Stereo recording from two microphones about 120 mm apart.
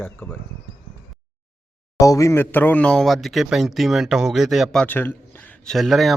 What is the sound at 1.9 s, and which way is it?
Speech, 25° left (ahead or behind).